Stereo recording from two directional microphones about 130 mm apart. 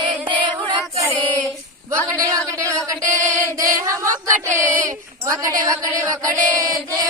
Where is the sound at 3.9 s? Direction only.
25° right (ahead or behind).